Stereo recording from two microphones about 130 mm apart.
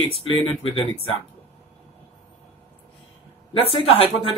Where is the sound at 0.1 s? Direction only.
45° left (ahead or behind).